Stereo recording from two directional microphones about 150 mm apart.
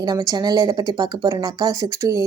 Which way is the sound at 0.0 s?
25° right (ahead or behind).